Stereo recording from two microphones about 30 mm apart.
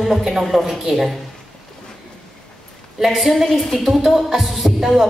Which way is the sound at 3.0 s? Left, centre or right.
Centre.